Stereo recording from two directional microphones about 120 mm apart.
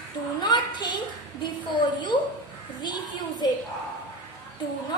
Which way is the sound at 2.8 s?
40° left (ahead or behind).